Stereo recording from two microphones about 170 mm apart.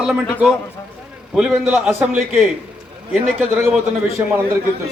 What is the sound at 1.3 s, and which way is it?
Speech, 5° right (ahead or behind).